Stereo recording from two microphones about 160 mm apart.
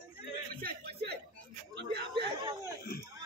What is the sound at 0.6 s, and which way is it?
Speech, 75° right (ahead or behind).